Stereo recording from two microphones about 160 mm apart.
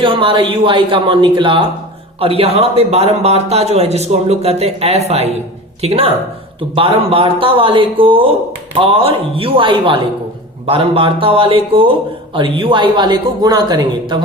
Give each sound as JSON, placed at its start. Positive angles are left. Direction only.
{"t": 0.0, "sound": "a man's voice", "side_deg": -30}